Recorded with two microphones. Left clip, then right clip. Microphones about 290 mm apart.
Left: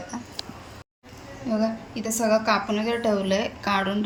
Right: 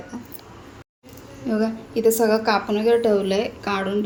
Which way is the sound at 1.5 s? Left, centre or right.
Centre.